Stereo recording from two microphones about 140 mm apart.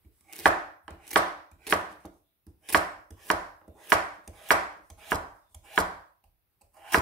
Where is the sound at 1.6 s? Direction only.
5° left (ahead or behind).